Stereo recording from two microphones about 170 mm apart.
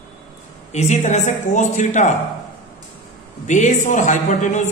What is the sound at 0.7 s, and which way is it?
A man's voice, 40° left (ahead or behind).